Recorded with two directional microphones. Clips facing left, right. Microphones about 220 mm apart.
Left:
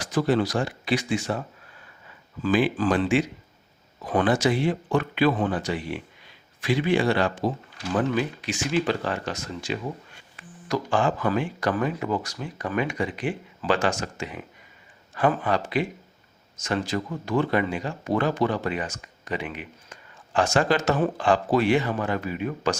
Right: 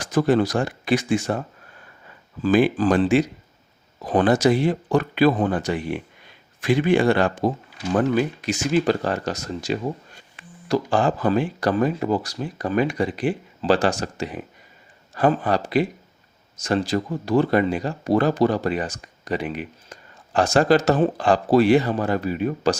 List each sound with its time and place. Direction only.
0.0 s speech: 50° right (ahead or behind)
2.4 s speech: 40° right (ahead or behind)